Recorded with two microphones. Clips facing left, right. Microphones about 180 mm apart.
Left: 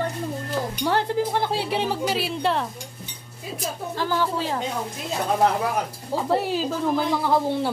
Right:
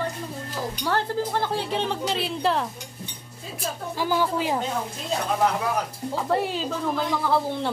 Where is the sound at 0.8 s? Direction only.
15° left (ahead or behind); by 2.7 s centre (ahead or behind).